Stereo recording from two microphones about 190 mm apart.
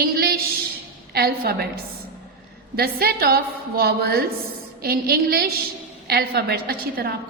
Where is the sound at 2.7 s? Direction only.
55° right (ahead or behind).